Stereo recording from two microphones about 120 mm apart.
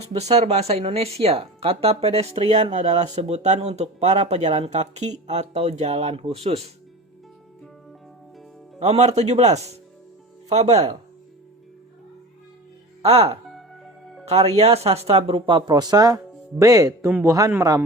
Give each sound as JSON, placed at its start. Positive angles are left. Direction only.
{"t": 0.1, "sound": "speech", "side_deg": -65}
{"t": 8.8, "sound": "speech", "side_deg": -70}
{"t": 13.0, "sound": "speech", "side_deg": -60}
{"t": 13.5, "sound": "music", "side_deg": 0}
{"t": 14.3, "sound": "speech", "side_deg": -60}